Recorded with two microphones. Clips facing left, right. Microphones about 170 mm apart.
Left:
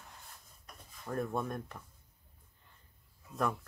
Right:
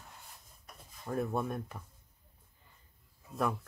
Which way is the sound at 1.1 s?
5° right (ahead or behind).